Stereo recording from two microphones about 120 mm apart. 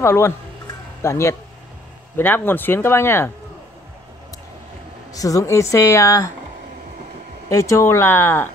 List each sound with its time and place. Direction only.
0.0 s a woman's voice: 20° left (ahead or behind)
5.1 s a woman's voice: 30° left (ahead or behind)
7.4 s a woman's voice: 25° left (ahead or behind)